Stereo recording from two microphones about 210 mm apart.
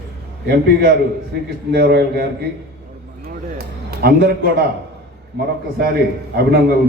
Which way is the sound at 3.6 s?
50° right (ahead or behind).